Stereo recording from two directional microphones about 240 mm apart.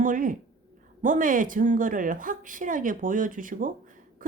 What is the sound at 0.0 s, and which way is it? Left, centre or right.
Speech, right.